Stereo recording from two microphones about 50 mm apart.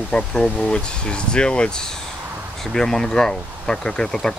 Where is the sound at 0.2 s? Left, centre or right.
Centre.